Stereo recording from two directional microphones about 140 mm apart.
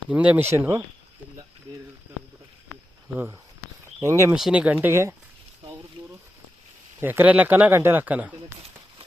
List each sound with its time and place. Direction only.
0.1 s speech: 10° right (ahead or behind)
4.0 s speech: 20° right (ahead or behind)
4.4 s speech: 5° right (ahead or behind)
7.0 s speech: 15° right (ahead or behind)